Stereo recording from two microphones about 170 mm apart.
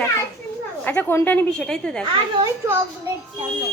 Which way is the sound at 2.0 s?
30° right (ahead or behind).